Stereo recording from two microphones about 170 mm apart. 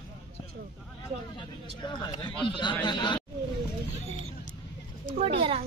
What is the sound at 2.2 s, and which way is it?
Speech, 25° left (ahead or behind).